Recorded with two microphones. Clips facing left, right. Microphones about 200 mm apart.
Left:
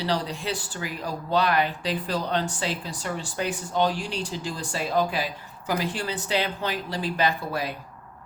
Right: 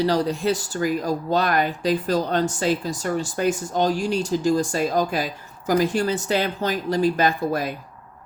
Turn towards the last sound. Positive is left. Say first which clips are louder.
# right 4 dB
turn(degrees=-45)  # may be behind; listen again after turning